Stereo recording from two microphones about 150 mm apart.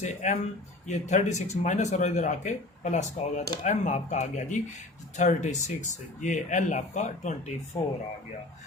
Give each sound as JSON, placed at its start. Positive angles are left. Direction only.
{"t": 0.0, "sound": "speech", "side_deg": 55}